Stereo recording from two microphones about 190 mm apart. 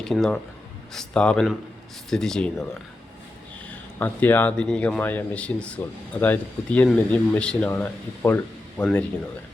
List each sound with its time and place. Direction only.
0.1 s speech: centre (ahead or behind)
3.7 s speech: 10° left (ahead or behind)